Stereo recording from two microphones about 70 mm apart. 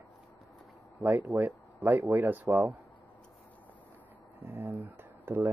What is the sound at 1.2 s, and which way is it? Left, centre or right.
Speech, right.